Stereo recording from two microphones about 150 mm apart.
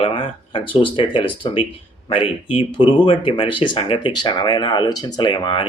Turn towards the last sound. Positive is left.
turn(degrees=35)  # may be behind; listen again after turning